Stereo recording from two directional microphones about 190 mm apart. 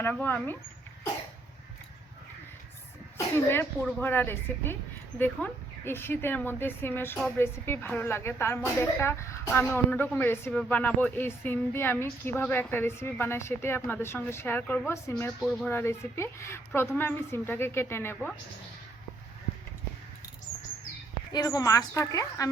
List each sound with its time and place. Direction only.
0.0 s speech: 10° left (ahead or behind)
3.3 s speech: 10° left (ahead or behind)
15.4 s speech: centre (ahead or behind)
21.3 s speech: 20° left (ahead or behind)